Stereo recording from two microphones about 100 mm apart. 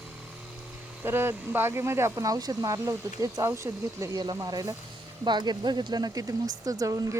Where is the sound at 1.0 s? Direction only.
25° right (ahead or behind).